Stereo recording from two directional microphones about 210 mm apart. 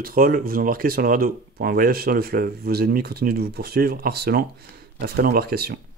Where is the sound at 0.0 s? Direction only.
45° right (ahead or behind).